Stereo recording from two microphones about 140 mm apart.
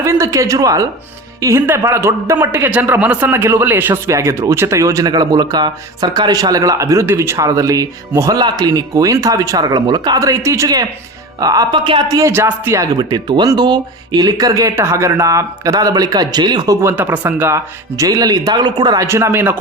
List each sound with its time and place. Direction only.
0.0 s speech: 20° right (ahead or behind)
13.0 s speech: 30° right (ahead or behind)
16.8 s speech: 15° right (ahead or behind)